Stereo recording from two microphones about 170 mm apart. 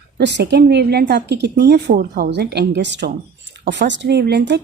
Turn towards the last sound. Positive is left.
turn(degrees=-75)  # may be behind; listen again after turning